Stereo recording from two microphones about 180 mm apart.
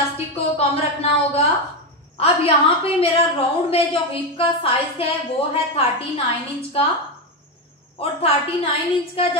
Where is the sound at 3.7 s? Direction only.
30° left (ahead or behind).